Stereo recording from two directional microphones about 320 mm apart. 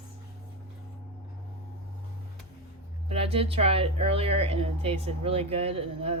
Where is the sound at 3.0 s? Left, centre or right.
Centre.